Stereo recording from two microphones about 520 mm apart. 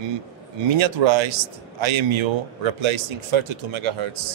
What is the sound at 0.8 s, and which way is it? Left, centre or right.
Speech, right.